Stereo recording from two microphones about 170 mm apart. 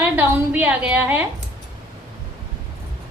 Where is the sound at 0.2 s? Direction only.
10° right (ahead or behind).